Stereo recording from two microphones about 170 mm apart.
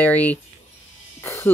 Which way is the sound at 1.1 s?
15° left (ahead or behind).